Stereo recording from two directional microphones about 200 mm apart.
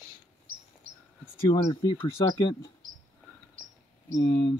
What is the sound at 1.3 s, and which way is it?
Speech, 20° left (ahead or behind).